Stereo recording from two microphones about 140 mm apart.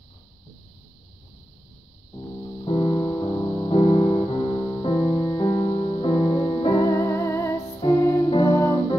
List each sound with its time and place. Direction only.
2.6 s music: 35° left (ahead or behind)
6.7 s music: 20° left (ahead or behind)